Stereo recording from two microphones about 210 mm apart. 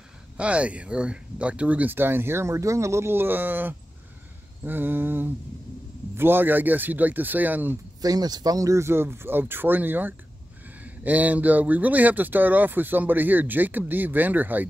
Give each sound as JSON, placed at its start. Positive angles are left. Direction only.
{"t": 0.4, "sound": "speech", "side_deg": -5}